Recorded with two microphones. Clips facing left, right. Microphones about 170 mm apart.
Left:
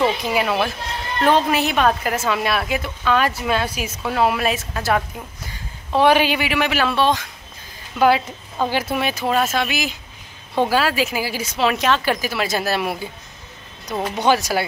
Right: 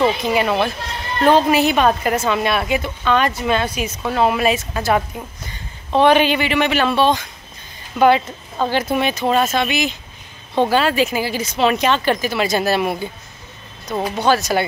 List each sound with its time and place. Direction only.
0.3 s a woman's voice: 5° left (ahead or behind)
14.1 s speech: 15° left (ahead or behind)